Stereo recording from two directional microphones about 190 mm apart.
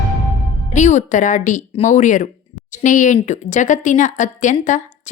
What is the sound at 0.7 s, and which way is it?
Speech, 40° left (ahead or behind).